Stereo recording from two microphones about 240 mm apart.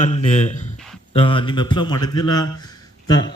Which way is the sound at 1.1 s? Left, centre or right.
Left.